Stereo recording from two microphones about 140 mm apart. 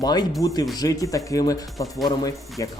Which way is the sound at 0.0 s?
30° left (ahead or behind).